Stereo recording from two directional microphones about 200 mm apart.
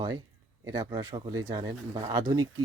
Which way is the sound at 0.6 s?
20° right (ahead or behind).